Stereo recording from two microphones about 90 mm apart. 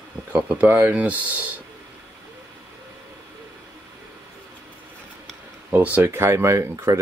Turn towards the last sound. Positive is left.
turn(degrees=-30)  # may be behind; listen again after turning